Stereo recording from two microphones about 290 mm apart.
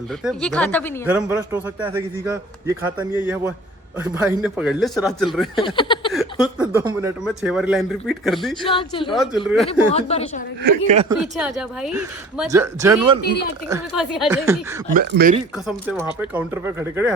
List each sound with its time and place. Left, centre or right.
0.3 s speech: centre
1.0 s speech: centre
5.5 s speech: centre
6.1 s speech: centre
8.7 s speech: centre
9.0 s speech: centre
9.6 s a woman's voice: left
10.6 s speech: right
11.2 s speech: centre
14.9 s speech: right
16.2 s speech: centre